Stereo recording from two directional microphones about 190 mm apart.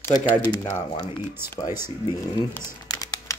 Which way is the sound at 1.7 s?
15° right (ahead or behind).